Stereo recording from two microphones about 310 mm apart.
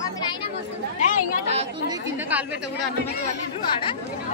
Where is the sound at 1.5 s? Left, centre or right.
Centre.